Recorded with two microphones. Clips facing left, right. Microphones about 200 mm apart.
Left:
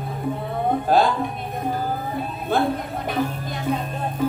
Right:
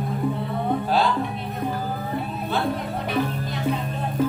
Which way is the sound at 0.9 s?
50° left (ahead or behind).